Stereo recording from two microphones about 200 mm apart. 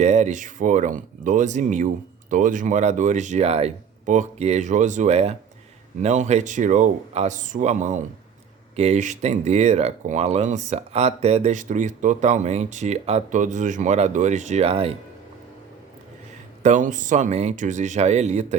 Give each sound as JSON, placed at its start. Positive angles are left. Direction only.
{"t": 0.0, "sound": "speech", "side_deg": -35}
{"t": 16.6, "sound": "speech", "side_deg": -40}